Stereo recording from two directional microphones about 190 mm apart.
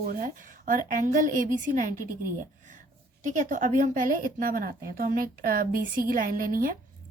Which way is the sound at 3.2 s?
40° right (ahead or behind).